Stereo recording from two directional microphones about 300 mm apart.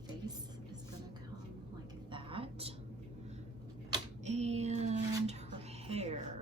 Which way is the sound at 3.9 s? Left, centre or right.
Right.